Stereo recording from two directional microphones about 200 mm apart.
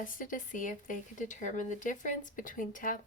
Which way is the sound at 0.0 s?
40° left (ahead or behind).